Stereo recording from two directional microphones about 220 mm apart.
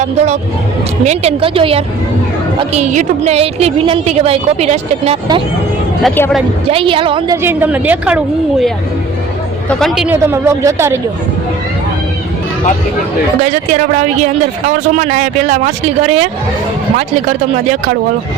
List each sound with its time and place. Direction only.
0.0 s a woman's voice: 30° right (ahead or behind)
6.0 s speech: 5° left (ahead or behind)
6.7 s a woman's voice: 25° right (ahead or behind)
7.4 s speech: 10° right (ahead or behind)
9.6 s speech: centre (ahead or behind)
13.4 s speech: 30° right (ahead or behind)